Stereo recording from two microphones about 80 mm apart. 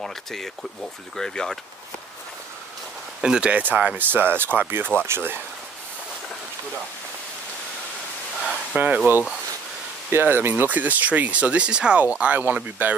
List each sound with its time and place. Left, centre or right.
0.0 s speech: centre
3.2 s speech: centre; by 5.4 s right
8.7 s speech: centre